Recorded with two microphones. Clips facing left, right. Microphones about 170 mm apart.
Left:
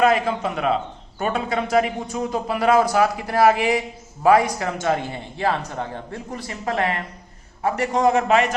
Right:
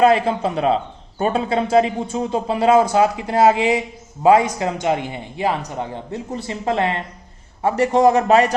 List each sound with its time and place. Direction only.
0.0 s a man's voice: 30° right (ahead or behind)